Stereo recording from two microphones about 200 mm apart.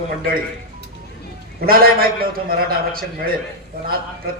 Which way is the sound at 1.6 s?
50° right (ahead or behind).